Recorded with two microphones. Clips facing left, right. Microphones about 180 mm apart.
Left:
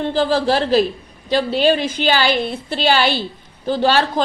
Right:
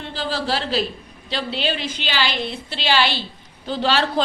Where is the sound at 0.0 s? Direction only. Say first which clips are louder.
Left 9 dB; 45° left (ahead or behind).